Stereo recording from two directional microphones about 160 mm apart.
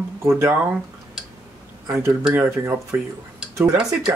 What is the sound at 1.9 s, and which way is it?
Speech, 15° right (ahead or behind).